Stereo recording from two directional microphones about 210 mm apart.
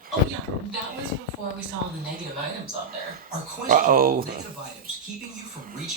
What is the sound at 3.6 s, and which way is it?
Speech, 40° right (ahead or behind).